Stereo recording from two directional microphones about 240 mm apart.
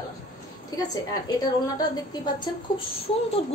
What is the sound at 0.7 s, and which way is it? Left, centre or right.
A woman's voice, centre.